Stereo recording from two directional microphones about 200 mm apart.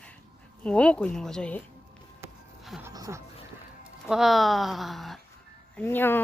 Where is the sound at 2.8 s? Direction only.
15° right (ahead or behind).